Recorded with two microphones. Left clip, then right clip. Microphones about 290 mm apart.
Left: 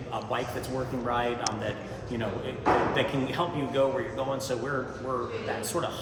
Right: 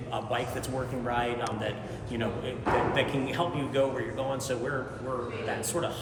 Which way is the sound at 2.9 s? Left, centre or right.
Centre.